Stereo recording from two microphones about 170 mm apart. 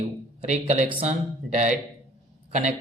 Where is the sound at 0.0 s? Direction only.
35° right (ahead or behind).